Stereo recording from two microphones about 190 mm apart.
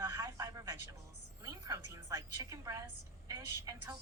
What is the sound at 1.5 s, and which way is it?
A woman's voice, 15° right (ahead or behind).